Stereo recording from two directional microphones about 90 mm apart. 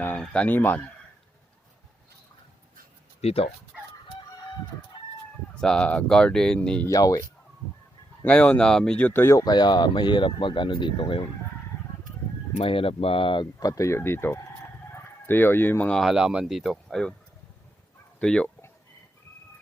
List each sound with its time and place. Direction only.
0.2 s speech: 15° left (ahead or behind)
5.5 s speech: 10° left (ahead or behind)
6.8 s speech: 40° left (ahead or behind)
8.2 s speech: 15° left (ahead or behind)
9.3 s speech: 50° left (ahead or behind); by 11.3 s 65° left (ahead or behind)
12.6 s speech: 90° left; by 13.5 s 65° left (ahead or behind)
13.6 s speech: 40° left (ahead or behind)
15.9 s speech: 5° left (ahead or behind)
16.1 s speech: 10° right (ahead or behind)
18.2 s speech: 10° left (ahead or behind)